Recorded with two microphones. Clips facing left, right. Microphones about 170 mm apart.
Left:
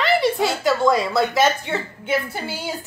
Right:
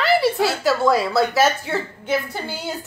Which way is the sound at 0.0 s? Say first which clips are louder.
Right 1 dB; 5° right (ahead or behind).